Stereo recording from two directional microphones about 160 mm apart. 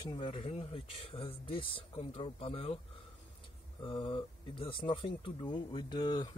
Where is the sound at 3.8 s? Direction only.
30° left (ahead or behind).